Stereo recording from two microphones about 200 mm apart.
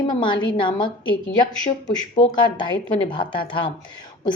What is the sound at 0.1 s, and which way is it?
A woman's voice, 25° left (ahead or behind).